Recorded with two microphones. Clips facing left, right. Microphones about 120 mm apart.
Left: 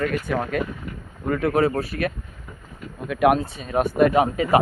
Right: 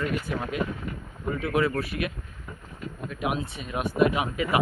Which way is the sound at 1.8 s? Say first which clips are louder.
Left 5 dB; 35° left (ahead or behind).